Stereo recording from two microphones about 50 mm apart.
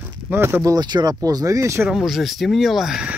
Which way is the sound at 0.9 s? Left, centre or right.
Right.